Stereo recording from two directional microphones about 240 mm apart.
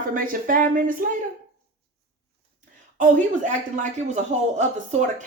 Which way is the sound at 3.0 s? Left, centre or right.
Right.